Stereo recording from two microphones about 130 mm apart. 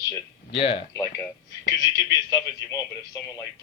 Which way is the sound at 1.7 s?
30° left (ahead or behind).